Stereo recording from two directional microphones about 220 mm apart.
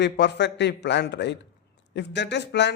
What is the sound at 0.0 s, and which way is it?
A man's voice, 50° left (ahead or behind).